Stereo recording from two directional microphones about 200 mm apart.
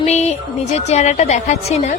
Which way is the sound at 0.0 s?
35° left (ahead or behind).